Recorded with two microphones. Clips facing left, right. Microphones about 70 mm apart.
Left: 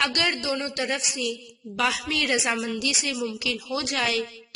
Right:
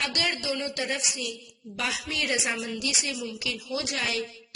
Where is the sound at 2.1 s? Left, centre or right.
Left.